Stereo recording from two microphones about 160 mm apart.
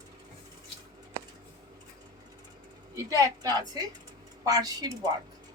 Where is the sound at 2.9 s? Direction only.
20° right (ahead or behind).